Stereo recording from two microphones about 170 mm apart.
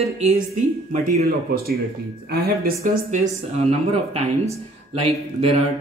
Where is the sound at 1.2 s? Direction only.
70° right (ahead or behind).